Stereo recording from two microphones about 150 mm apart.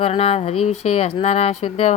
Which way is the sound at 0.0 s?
40° left (ahead or behind).